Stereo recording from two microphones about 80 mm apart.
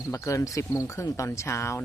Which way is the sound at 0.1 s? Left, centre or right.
Left.